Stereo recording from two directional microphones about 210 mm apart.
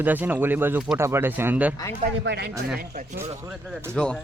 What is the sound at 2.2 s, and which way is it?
Speech, 50° right (ahead or behind).